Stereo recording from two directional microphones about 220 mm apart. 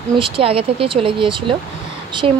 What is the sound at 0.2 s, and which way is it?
Speech, 25° right (ahead or behind).